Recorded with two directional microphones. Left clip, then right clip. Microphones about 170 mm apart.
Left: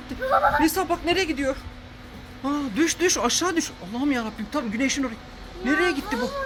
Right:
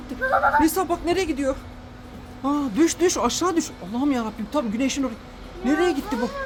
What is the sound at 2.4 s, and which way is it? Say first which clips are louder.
Speech: right 3 dB; 20° right (ahead or behind).